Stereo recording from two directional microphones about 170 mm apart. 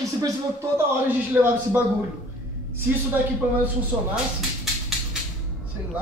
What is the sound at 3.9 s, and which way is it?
Speech, 5° right (ahead or behind).